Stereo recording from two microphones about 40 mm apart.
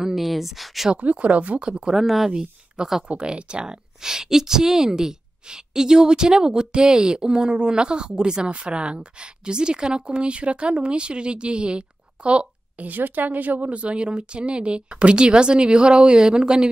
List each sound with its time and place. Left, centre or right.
0.0 s speech: centre
1.0 s speech: right
1.9 s speech: centre
2.3 s a woman's voice: centre
3.1 s a woman's voice: right
12.8 s a woman's voice: right